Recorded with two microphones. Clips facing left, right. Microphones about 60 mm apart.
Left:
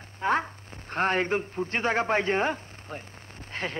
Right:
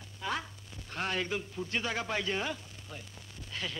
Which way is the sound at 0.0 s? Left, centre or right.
Left.